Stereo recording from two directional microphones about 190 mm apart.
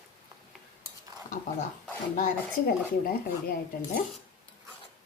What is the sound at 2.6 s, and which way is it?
Speech, 50° left (ahead or behind).